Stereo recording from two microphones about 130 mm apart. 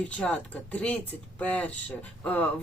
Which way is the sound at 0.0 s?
10° left (ahead or behind).